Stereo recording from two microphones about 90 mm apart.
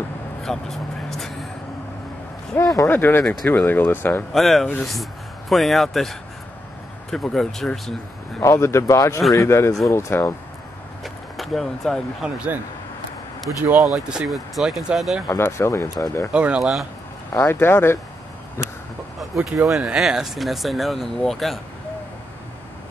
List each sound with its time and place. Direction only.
0.4 s vehicle: 5° left (ahead or behind)
2.5 s speech: 35° left (ahead or behind)
2.9 s speech: 25° left (ahead or behind)
4.3 s speech: centre (ahead or behind)
8.4 s speech: 30° left (ahead or behind)
11.3 s speech: centre (ahead or behind)
12.2 s speech: 15° right (ahead or behind)
13.7 s speech: 5° right (ahead or behind)
15.2 s speech: 30° left (ahead or behind)
16.3 s speech: 10° right (ahead or behind)
17.5 s speech: 25° left (ahead or behind)
19.1 s speech: 5° right (ahead or behind)